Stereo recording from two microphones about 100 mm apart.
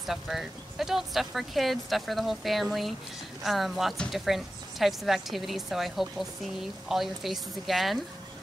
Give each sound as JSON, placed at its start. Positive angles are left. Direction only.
{"t": 0.0, "sound": "speech", "side_deg": -5}